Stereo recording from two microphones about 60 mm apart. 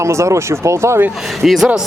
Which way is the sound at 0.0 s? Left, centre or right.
Right.